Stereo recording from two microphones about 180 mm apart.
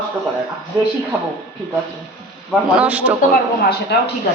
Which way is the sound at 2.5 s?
5° right (ahead or behind).